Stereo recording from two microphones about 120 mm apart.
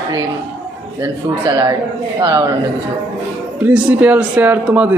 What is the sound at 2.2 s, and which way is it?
Speech, 30° right (ahead or behind).